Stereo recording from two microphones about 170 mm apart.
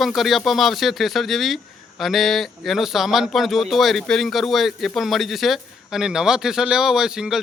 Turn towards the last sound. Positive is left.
turn(degrees=-5)  # may be behind; listen again after turning